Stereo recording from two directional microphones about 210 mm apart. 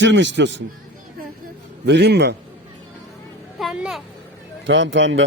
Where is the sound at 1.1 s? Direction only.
50° right (ahead or behind).